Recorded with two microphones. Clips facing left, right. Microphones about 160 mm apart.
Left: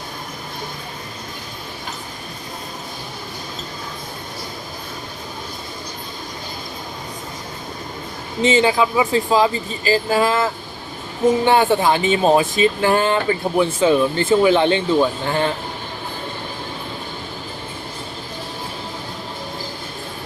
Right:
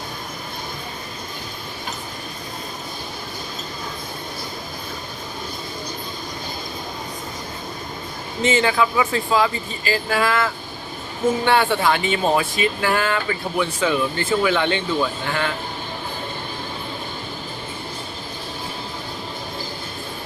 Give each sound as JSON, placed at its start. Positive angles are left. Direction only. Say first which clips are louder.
{"t": 8.4, "sound": "speech", "louder": "left 3 dB", "side_deg": 20}
{"t": 10.1, "sound": "speech", "louder": "even", "side_deg": 20}